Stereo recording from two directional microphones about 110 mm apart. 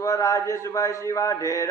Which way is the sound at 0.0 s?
30° left (ahead or behind).